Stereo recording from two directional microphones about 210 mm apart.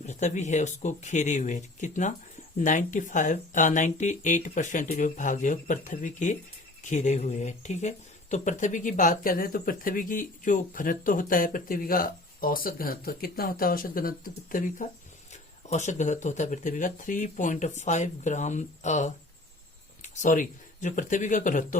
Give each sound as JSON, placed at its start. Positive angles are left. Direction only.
{"t": 0.0, "sound": "speech", "side_deg": 35}